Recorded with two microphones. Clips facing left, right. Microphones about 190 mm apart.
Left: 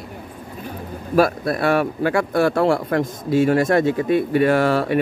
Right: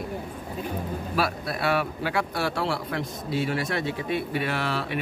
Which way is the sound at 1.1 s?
50° left (ahead or behind).